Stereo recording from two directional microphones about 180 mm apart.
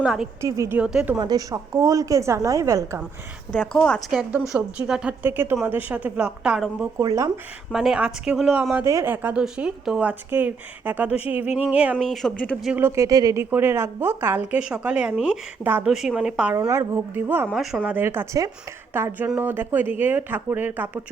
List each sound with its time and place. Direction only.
0.0 s speech: 5° right (ahead or behind)
0.4 s speech: 15° right (ahead or behind)
1.2 s a woman's voice: 20° right (ahead or behind)
3.5 s speech: 5° left (ahead or behind)
4.2 s speech: 10° right (ahead or behind)
7.0 s a woman's voice: 20° right (ahead or behind)
7.7 s speech: centre (ahead or behind)
12.7 s speech: 15° right (ahead or behind)
16.6 s speech: 15° right (ahead or behind)